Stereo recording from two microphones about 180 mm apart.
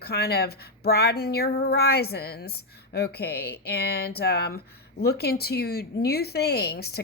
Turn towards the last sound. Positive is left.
turn(degrees=65)  # may be behind; listen again after turning